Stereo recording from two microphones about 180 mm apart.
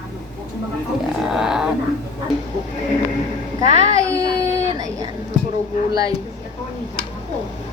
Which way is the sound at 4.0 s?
20° right (ahead or behind).